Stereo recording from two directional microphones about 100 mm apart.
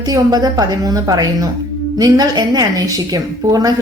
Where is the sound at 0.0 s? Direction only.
40° right (ahead or behind).